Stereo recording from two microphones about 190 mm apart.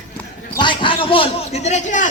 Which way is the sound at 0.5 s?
25° left (ahead or behind).